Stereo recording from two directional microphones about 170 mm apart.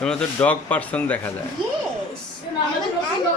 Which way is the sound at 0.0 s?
5° left (ahead or behind).